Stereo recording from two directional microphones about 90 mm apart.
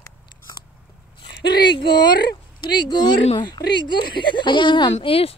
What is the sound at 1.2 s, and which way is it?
Speech, 60° left (ahead or behind).